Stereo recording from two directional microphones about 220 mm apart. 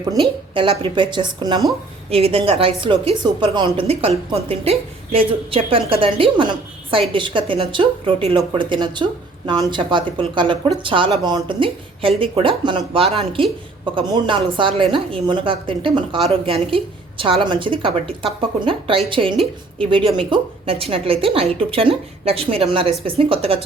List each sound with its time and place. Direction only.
0.5 s a woman's voice: 20° right (ahead or behind)